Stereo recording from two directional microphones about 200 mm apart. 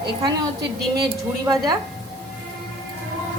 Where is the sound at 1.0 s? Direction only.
20° right (ahead or behind).